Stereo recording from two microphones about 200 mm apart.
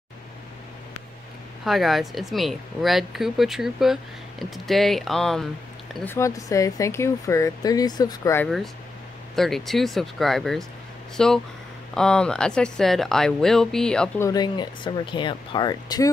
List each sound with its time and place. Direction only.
1.6 s speech: centre (ahead or behind); by 8.5 s 15° left (ahead or behind)
9.3 s speech: centre (ahead or behind)
14.2 s speech: 20° left (ahead or behind)